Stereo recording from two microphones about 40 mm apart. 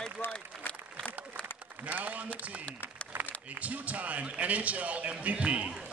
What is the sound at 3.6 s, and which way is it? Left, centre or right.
A man's voice, right.